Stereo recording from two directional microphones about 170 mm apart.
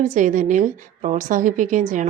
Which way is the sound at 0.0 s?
50° right (ahead or behind).